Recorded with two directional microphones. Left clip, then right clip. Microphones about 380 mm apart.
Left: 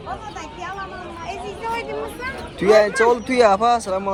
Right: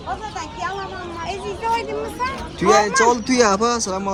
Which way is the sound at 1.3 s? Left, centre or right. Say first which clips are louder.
Right 4 dB; right.